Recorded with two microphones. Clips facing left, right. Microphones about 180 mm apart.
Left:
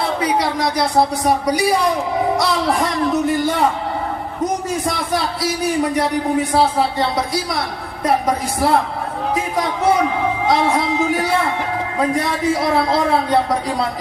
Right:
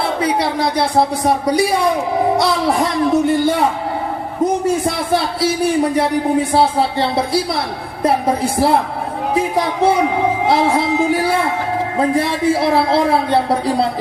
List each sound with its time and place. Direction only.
0.0 s speech: 30° right (ahead or behind)
5.1 s speech: 30° right (ahead or behind)
9.3 s a sound: 30° right (ahead or behind)
10.4 s speech: 30° right (ahead or behind)